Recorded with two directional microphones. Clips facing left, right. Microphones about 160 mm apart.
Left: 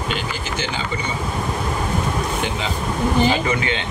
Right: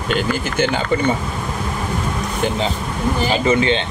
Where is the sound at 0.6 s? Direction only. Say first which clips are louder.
Right 9 dB; 55° right (ahead or behind).